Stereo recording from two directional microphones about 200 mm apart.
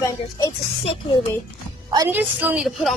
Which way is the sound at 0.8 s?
30° left (ahead or behind).